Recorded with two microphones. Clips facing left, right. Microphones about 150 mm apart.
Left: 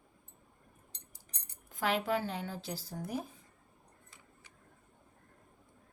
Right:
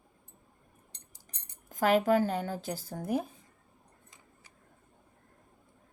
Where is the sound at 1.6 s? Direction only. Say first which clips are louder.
Right 7 dB; 45° right (ahead or behind).